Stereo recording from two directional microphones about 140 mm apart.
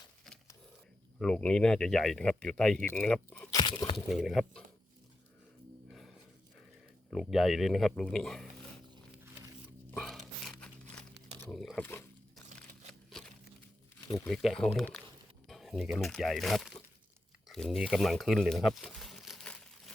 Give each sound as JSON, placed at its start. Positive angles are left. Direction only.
{"t": 1.2, "sound": "speech", "side_deg": 5}
{"t": 3.5, "sound": "crunch", "side_deg": 30}
{"t": 4.1, "sound": "speech", "side_deg": 0}
{"t": 5.9, "sound": "a sound", "side_deg": 0}
{"t": 7.1, "sound": "speech", "side_deg": 0}
{"t": 9.2, "sound": "a sound", "side_deg": -20}
{"t": 9.9, "sound": "a sound", "side_deg": 0}
{"t": 11.5, "sound": "speech", "side_deg": 0}
{"t": 11.8, "sound": "speech", "side_deg": 15}
{"t": 12.9, "sound": "crumpling", "side_deg": 0}
{"t": 14.2, "sound": "speech", "side_deg": 5}
{"t": 17.5, "sound": "crumpling", "side_deg": 0}